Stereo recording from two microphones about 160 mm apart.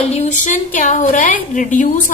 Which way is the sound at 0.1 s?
45° left (ahead or behind).